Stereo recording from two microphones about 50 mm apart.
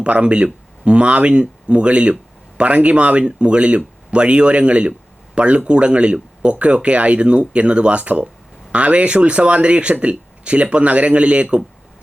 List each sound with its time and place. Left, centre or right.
0.0 s speech: right